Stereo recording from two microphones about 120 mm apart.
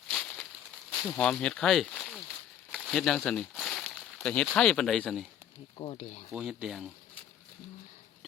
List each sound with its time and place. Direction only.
0.1 s a sound: 5° left (ahead or behind)
1.0 s speech: 5° left (ahead or behind)
2.7 s a sound: 5° left (ahead or behind)
4.5 s speech: 5° left (ahead or behind)
5.7 s speech: 45° left (ahead or behind)
6.3 s speech: 5° right (ahead or behind)